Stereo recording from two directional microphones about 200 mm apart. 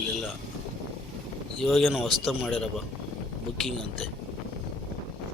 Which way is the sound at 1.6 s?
Centre (ahead or behind).